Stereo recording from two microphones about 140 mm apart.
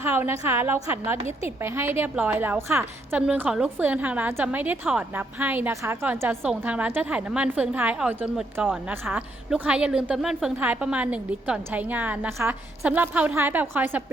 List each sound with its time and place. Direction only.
0.0 s a woman's voice: 15° right (ahead or behind)